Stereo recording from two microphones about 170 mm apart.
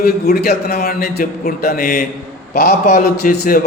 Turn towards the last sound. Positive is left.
turn(degrees=70)  # may be behind; listen again after turning